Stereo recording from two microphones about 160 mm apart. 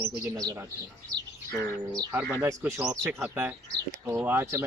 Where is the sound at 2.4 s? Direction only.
15° right (ahead or behind).